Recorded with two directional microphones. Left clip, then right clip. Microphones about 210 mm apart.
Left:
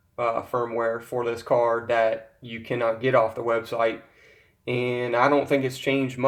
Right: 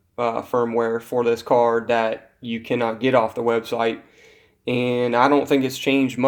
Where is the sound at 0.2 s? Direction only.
45° right (ahead or behind).